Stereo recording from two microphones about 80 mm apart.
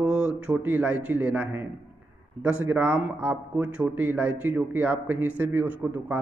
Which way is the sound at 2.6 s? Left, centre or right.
Right.